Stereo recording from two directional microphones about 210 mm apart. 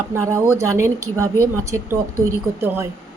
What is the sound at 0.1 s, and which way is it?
Speech, 15° right (ahead or behind).